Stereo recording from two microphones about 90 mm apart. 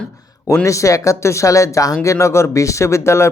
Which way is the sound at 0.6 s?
35° left (ahead or behind).